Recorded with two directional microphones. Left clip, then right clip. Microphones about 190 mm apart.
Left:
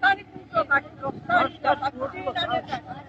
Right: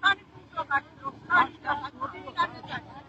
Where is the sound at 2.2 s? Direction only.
15° left (ahead or behind).